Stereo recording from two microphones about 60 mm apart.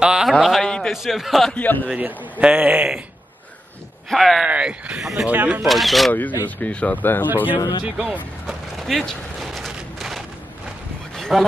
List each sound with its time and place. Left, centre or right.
0.0 s a man's voice: centre
0.3 s a man's voice: centre
0.7 s a sound: centre
0.9 s a man's voice: centre
1.5 s speech: left
2.0 s speech: right
4.1 s a man's voice: centre
4.5 s speech: centre
5.7 s a man's voice: centre
6.6 s speech: left
7.4 s speech: right
8.7 s a sound: centre